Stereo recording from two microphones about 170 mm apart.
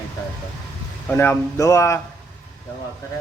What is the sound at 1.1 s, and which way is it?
Speech, 15° left (ahead or behind).